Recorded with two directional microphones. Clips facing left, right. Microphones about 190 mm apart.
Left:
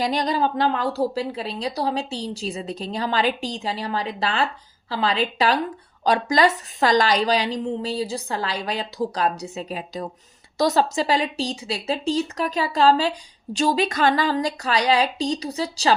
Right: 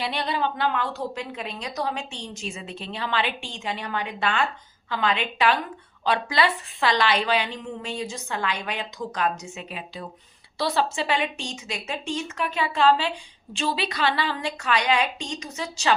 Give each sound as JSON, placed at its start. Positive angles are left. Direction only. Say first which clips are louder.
{"t": 0.0, "sound": "a woman's voice", "louder": "left 5 dB", "side_deg": 40}